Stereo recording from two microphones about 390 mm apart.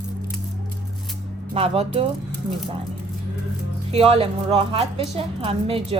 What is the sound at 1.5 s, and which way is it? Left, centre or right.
Speech, centre.